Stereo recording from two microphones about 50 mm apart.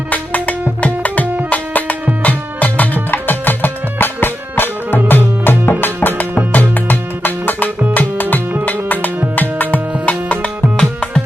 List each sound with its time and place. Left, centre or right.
0.1 s music: left
10.8 s music: centre